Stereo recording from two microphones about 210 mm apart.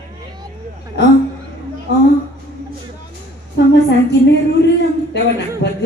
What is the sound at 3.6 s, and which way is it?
Speech, 55° left (ahead or behind).